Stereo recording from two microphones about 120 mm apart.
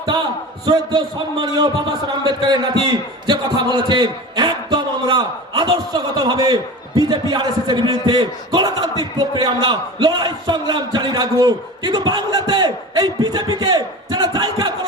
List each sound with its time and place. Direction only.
0.6 s a man's voice: 40° right (ahead or behind)